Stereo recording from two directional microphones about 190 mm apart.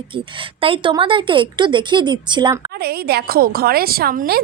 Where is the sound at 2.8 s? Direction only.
55° right (ahead or behind).